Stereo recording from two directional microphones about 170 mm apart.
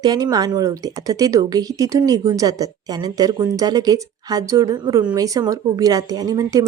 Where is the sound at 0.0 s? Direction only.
20° right (ahead or behind).